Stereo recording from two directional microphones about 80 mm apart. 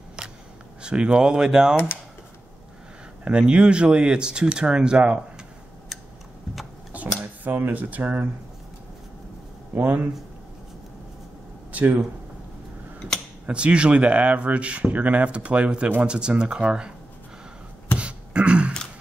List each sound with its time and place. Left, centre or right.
0.8 s speech: centre
3.3 s speech: centre
6.9 s a sound: centre
9.8 s speech: right
11.7 s speech: centre
13.5 s speech: centre
17.9 s beatboxing: centre